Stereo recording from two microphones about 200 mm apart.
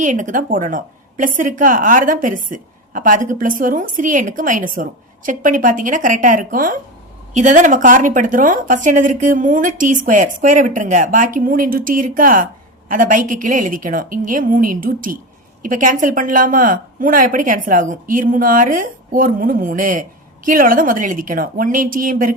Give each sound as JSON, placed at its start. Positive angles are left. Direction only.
{"t": 0.0, "sound": "a woman's voice", "side_deg": -40}